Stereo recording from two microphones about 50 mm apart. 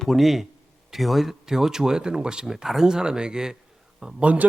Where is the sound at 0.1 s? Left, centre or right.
Centre.